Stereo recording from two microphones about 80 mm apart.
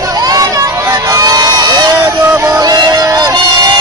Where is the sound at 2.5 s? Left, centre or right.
Right.